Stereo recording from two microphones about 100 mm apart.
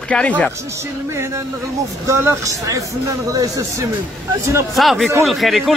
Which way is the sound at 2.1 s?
30° right (ahead or behind).